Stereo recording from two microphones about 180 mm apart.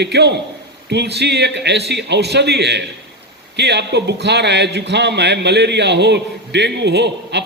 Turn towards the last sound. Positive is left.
turn(degrees=-70)  # may be behind; listen again after turning